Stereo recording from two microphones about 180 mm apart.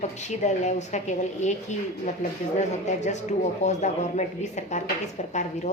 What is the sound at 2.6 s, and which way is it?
A woman's voice, 40° left (ahead or behind).